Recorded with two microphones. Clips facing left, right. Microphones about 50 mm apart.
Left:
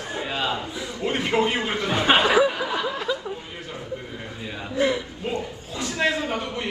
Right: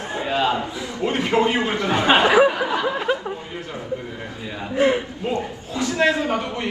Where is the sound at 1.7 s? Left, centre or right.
Right.